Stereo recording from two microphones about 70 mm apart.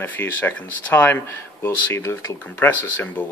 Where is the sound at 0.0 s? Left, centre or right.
Left.